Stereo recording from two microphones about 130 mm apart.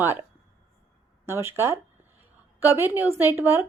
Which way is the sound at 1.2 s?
20° right (ahead or behind).